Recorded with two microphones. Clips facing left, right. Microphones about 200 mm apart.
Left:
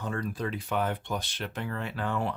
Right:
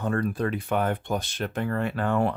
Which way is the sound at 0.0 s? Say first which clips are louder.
Right 6 dB; 55° right (ahead or behind).